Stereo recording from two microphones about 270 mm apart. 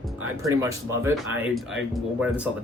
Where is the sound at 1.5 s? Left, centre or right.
Centre.